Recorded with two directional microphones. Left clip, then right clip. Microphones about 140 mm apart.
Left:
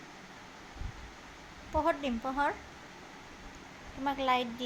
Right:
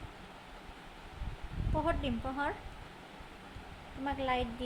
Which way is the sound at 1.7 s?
25° left (ahead or behind).